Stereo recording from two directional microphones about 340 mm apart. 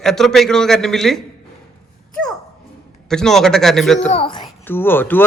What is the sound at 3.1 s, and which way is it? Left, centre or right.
A man's voice, centre.